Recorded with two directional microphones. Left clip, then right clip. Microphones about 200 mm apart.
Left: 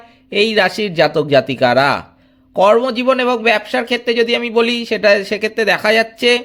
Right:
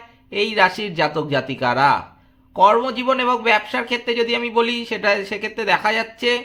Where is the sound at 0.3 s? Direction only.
35° left (ahead or behind).